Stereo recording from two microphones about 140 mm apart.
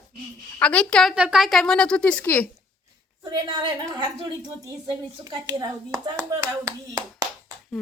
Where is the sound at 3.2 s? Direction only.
35° right (ahead or behind).